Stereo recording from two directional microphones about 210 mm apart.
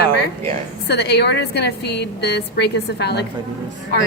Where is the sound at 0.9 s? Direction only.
50° left (ahead or behind).